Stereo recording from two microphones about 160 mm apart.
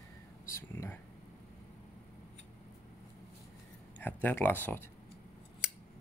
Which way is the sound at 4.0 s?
10° left (ahead or behind).